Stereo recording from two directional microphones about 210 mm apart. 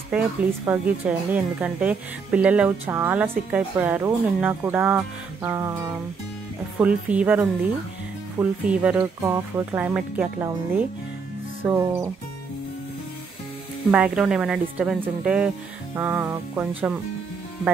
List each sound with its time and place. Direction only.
0.1 s a woman's voice: 5° right (ahead or behind)
13.8 s speech: 5° right (ahead or behind)